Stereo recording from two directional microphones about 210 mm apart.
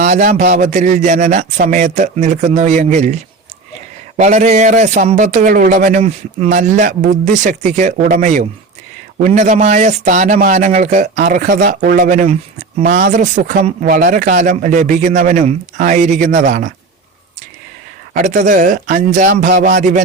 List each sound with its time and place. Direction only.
0.0 s a man's voice: 40° right (ahead or behind)
4.2 s a man's voice: 35° right (ahead or behind)
18.1 s a man's voice: 35° right (ahead or behind)